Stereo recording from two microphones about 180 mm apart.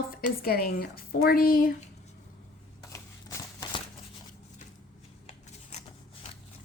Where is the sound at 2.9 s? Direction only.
20° left (ahead or behind).